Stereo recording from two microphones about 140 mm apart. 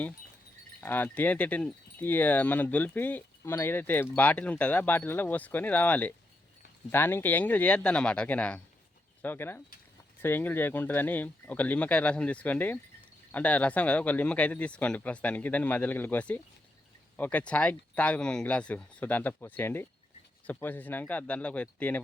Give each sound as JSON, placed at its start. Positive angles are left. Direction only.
{"t": 0.8, "sound": "speech", "side_deg": 10}